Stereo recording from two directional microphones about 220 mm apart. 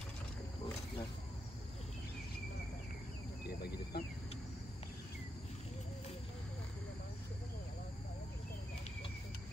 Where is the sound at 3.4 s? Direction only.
45° left (ahead or behind).